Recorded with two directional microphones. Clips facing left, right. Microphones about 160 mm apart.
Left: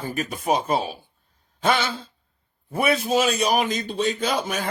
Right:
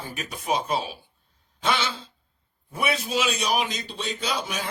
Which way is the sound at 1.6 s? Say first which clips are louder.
Left 4 dB; 50° left (ahead or behind).